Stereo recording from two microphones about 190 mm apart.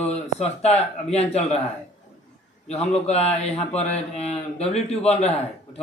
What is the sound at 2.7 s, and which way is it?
A man's voice, 35° left (ahead or behind).